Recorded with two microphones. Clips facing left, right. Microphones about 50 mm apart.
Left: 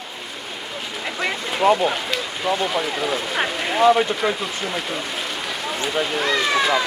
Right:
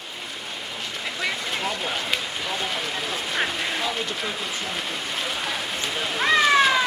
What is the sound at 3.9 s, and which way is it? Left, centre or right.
Speech, left.